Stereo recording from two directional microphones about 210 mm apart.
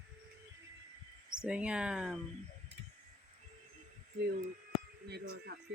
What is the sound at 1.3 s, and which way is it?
Speech, 5° right (ahead or behind).